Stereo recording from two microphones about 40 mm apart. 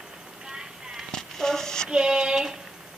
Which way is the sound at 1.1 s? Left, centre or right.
Centre.